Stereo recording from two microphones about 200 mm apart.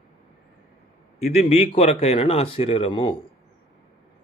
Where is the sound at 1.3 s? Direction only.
30° left (ahead or behind).